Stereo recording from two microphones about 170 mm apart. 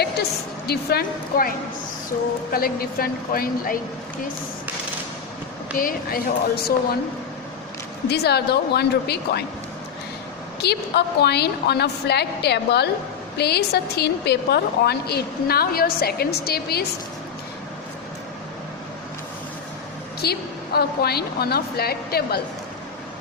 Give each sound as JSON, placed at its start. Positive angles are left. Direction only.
{"t": 0.7, "sound": "a woman's voice", "side_deg": 70}
{"t": 5.7, "sound": "speech", "side_deg": 60}
{"t": 8.1, "sound": "a woman's voice", "side_deg": 75}
{"t": 10.6, "sound": "a woman's voice", "side_deg": 75}
{"t": 20.2, "sound": "a woman's voice", "side_deg": 70}